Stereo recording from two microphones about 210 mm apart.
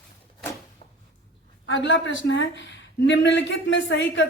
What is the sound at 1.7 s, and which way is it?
A woman's voice, 65° left (ahead or behind).